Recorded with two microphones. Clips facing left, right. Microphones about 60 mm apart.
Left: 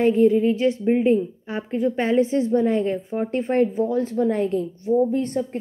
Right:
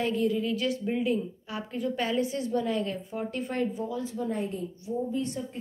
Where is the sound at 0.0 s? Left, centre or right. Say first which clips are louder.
Left 11 dB; left.